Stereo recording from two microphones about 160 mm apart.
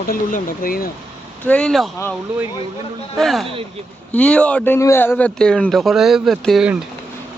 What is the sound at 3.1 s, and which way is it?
A man's voice, centre (ahead or behind).